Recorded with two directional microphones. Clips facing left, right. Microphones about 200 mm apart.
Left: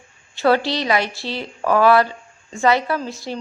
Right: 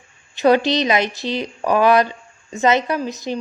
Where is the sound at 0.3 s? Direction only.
20° right (ahead or behind).